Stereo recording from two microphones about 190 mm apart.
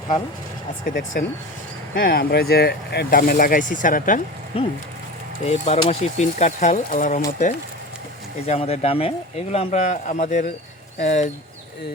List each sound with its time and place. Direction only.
0.9 s speech: 45° left (ahead or behind)
4.5 s speech: 30° left (ahead or behind)